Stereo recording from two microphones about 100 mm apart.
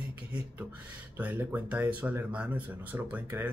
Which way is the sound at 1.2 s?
20° right (ahead or behind).